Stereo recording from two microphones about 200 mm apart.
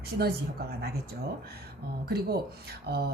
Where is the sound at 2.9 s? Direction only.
55° right (ahead or behind).